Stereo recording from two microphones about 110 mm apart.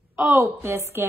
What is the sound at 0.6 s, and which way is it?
Speech, 20° right (ahead or behind).